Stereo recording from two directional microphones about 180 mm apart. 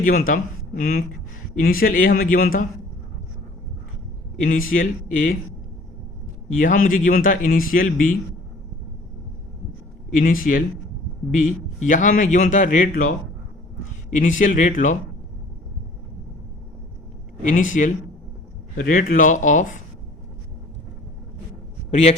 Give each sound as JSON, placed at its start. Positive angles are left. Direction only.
{"t": 0.0, "sound": "a man's voice", "side_deg": 50}
{"t": 4.7, "sound": "a man's voice", "side_deg": 50}
{"t": 6.6, "sound": "a man's voice", "side_deg": 50}
{"t": 10.2, "sound": "a man's voice", "side_deg": 50}
{"t": 14.1, "sound": "a man's voice", "side_deg": 45}
{"t": 17.5, "sound": "a man's voice", "side_deg": 45}
{"t": 21.8, "sound": "a man's voice", "side_deg": 40}